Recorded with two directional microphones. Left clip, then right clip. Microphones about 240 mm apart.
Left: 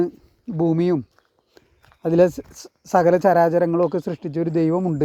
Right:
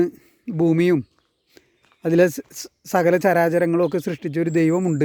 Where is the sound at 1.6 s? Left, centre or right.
Right.